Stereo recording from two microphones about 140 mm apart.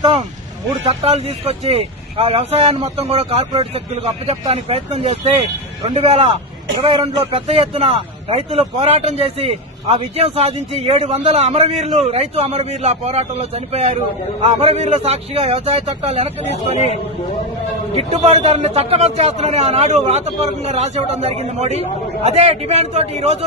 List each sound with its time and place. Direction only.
0.9 s speech: 45° right (ahead or behind)
3.5 s speech: 35° right (ahead or behind)
4.3 s speech: 45° right (ahead or behind)
17.9 s speech: 50° right (ahead or behind)